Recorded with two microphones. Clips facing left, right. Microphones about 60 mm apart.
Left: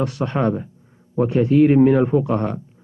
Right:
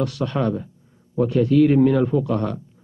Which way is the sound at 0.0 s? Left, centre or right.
Left.